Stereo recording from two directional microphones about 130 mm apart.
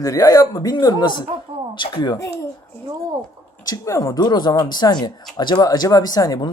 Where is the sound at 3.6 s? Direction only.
25° left (ahead or behind).